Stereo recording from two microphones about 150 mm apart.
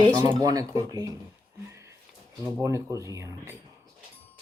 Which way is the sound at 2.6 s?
20° right (ahead or behind).